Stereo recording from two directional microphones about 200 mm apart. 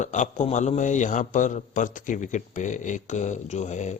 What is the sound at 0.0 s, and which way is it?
A man's voice, 35° left (ahead or behind).